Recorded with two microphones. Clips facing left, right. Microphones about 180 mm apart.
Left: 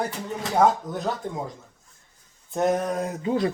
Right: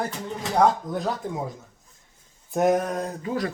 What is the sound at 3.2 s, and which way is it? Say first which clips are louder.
Speech: left 5 dB; 25° left (ahead or behind).